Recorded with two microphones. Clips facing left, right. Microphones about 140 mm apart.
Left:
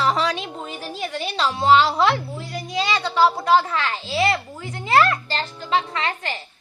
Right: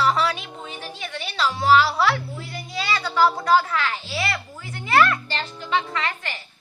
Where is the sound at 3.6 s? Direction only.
30° left (ahead or behind).